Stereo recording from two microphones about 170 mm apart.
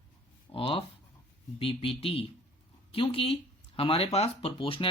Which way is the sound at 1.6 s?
35° left (ahead or behind).